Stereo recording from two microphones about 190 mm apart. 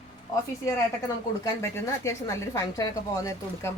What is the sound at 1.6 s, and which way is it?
Speech, 15° left (ahead or behind).